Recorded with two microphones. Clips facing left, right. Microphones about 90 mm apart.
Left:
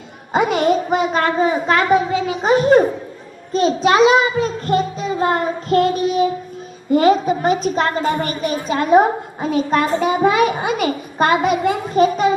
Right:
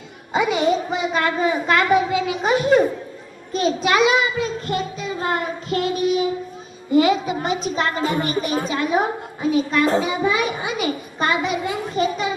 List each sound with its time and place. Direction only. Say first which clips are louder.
0.3 s a woman's voice: left 3 dB; 50° left (ahead or behind)